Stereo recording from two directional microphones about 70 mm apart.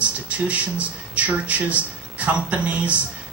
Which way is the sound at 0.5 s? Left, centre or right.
Centre.